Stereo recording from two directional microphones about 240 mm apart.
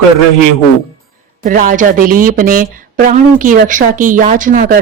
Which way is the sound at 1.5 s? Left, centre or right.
Right.